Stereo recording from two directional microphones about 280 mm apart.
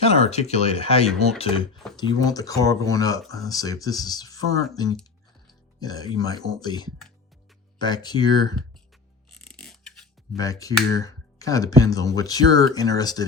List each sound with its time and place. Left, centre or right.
0.0 s speech: left
5.8 s speech: centre
9.5 s a sound: centre
10.3 s speech: centre